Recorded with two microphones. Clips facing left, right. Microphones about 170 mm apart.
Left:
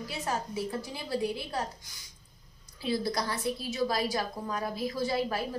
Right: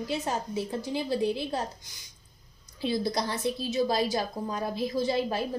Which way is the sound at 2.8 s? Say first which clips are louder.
Right 2 dB; 20° right (ahead or behind).